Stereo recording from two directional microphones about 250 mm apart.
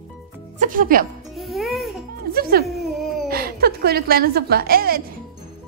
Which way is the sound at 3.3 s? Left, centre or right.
Right.